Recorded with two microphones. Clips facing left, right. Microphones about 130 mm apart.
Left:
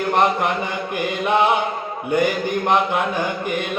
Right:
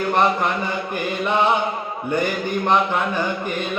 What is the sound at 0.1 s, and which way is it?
Chant, 15° left (ahead or behind).